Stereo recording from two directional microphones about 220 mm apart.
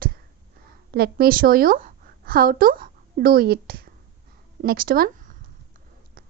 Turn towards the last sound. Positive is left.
turn(degrees=-40)  # may be behind; listen again after turning